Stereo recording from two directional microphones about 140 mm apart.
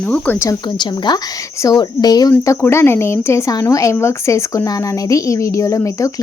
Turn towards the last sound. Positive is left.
turn(degrees=25)  # may be behind; listen again after turning